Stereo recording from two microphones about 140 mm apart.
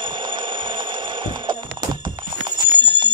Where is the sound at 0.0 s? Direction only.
35° right (ahead or behind).